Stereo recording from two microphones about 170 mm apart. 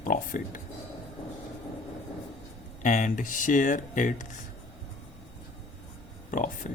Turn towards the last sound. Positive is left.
turn(degrees=50)  # may be behind; listen again after turning